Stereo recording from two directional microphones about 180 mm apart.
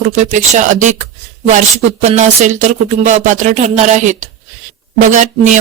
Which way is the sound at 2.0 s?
40° right (ahead or behind).